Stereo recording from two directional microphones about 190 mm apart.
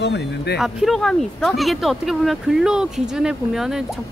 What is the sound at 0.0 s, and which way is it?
Speech, 60° left (ahead or behind).